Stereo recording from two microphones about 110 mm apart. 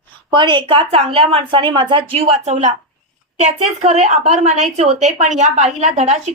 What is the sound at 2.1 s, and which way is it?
A woman's voice, 65° right (ahead or behind).